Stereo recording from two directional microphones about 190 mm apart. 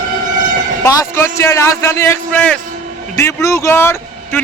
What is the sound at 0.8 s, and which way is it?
A man's voice, 15° left (ahead or behind).